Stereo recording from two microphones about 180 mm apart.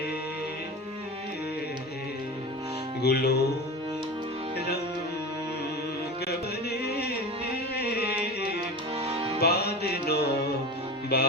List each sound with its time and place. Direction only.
3.0 s music: 65° left (ahead or behind)
4.5 s music: 60° left (ahead or behind)
6.2 s carnatic music: 65° left (ahead or behind)
7.8 s music: 60° left (ahead or behind)
9.0 s music: 35° right (ahead or behind)
9.4 s music: 60° left (ahead or behind)